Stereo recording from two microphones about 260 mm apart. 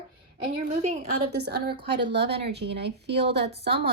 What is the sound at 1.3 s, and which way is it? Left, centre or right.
A woman's voice, right.